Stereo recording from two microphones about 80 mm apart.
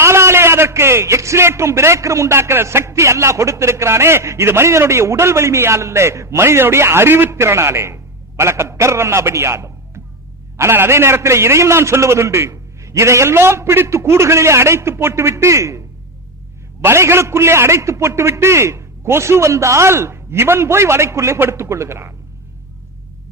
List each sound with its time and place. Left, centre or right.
0.0 s a man's voice: right
16.8 s a man's voice: right